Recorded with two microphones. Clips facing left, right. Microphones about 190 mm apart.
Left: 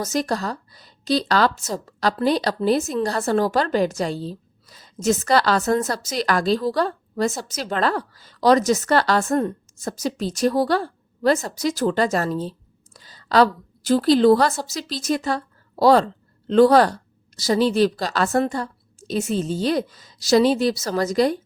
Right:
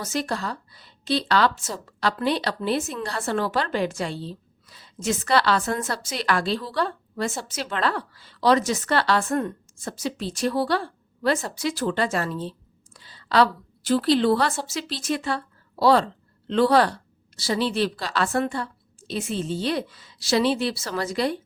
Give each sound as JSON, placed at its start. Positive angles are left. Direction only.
{"t": 0.0, "sound": "a woman's voice", "side_deg": 40}